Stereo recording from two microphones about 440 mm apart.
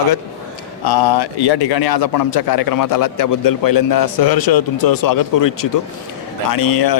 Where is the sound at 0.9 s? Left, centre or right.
Left.